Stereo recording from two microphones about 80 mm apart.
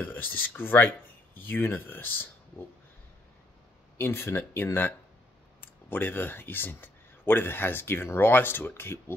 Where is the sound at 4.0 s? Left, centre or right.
Left.